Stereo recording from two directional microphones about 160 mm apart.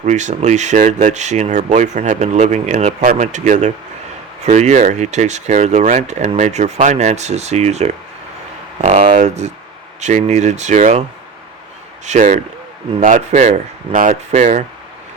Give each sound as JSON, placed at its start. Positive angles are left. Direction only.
{"t": 0.0, "sound": "speech", "side_deg": -45}
{"t": 9.1, "sound": "speech", "side_deg": -45}
{"t": 12.0, "sound": "speech", "side_deg": -50}